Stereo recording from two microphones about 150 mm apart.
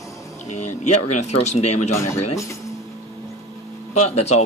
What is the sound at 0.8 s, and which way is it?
Speech, 50° left (ahead or behind).